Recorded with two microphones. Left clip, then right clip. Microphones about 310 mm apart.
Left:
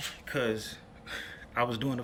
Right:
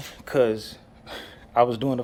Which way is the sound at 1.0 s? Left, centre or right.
Centre.